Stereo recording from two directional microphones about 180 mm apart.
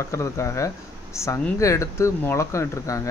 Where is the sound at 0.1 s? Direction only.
15° left (ahead or behind).